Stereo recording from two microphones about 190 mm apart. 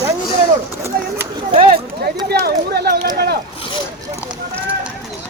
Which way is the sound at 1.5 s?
30° right (ahead or behind).